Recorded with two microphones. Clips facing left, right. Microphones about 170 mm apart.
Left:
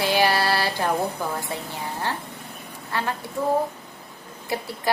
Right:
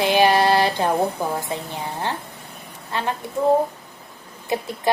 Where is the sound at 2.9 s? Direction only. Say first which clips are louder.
Right 2 dB; 20° right (ahead or behind).